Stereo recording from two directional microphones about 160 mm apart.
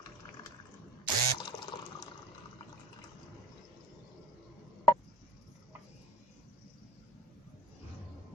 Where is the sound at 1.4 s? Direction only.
30° left (ahead or behind).